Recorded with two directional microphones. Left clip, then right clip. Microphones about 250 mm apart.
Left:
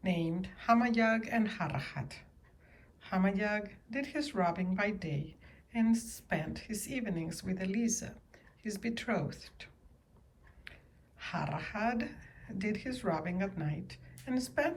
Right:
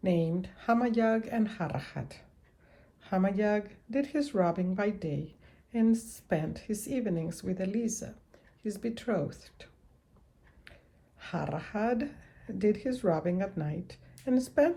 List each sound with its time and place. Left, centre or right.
0.0 s speech: centre
10.7 s a sound: centre
11.2 s speech: centre